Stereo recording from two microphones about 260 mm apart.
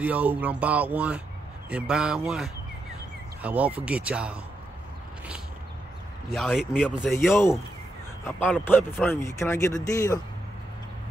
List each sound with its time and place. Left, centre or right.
0.0 s speech: centre
6.3 s speech: centre
8.4 s speech: centre